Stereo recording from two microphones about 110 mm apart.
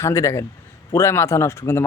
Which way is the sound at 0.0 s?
25° left (ahead or behind).